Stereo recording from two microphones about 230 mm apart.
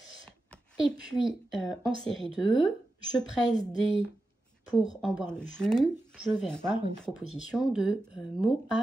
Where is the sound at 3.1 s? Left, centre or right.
Centre.